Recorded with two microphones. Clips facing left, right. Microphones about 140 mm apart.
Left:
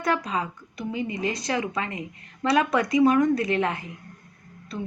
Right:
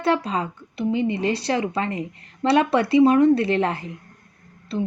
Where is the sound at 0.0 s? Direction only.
30° right (ahead or behind).